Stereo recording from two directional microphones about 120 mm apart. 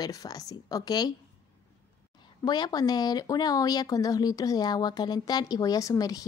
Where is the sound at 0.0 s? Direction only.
30° left (ahead or behind).